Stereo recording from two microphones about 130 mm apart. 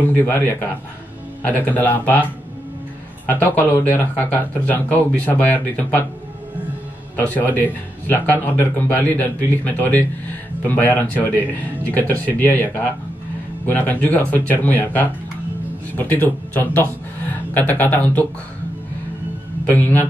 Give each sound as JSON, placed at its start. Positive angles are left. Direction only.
{"t": 0.0, "sound": "a man's voice", "side_deg": 15}
{"t": 3.3, "sound": "a man's voice", "side_deg": 10}
{"t": 7.2, "sound": "a man's voice", "side_deg": 15}
{"t": 19.7, "sound": "a man's voice", "side_deg": 15}